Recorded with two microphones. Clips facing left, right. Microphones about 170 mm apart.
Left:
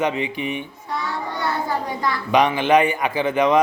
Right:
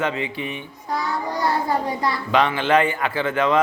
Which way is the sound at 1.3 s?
35° right (ahead or behind).